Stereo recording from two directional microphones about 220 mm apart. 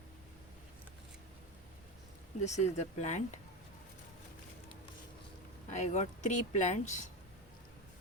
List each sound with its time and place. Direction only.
2.4 s speech: 30° left (ahead or behind)
5.7 s speech: 30° left (ahead or behind)